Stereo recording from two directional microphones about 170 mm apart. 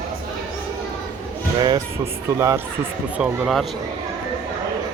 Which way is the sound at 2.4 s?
20° right (ahead or behind).